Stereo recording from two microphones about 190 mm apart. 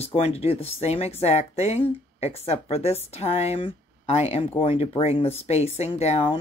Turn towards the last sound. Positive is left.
turn(degrees=30)  # may be behind; listen again after turning